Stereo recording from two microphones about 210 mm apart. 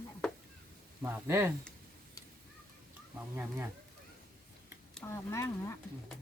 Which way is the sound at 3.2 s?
10° right (ahead or behind).